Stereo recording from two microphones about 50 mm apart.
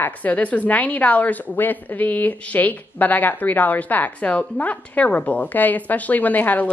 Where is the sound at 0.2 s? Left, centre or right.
Left.